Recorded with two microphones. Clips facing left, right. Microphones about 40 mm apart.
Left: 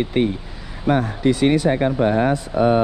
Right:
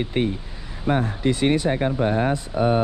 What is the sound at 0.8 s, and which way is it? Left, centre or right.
Speech, left.